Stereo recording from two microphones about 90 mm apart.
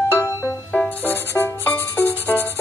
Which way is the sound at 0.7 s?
20° left (ahead or behind).